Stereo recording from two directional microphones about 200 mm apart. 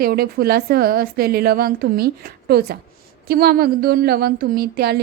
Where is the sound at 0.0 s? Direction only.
50° right (ahead or behind).